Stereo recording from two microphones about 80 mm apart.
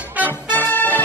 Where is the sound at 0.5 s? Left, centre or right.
Left.